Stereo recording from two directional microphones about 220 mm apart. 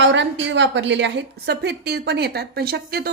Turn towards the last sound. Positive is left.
turn(degrees=-45)  # may be behind; listen again after turning